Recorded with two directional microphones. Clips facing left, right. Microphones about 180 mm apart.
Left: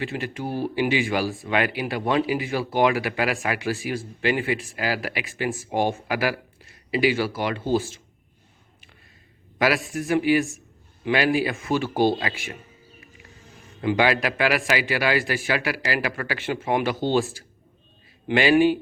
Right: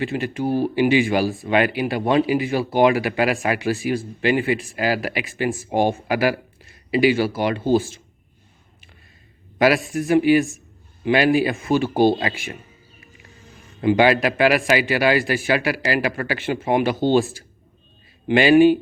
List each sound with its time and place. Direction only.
0.0 s speech: 20° right (ahead or behind)
9.6 s speech: 20° right (ahead or behind)
13.8 s speech: 20° right (ahead or behind)
18.3 s speech: 20° right (ahead or behind)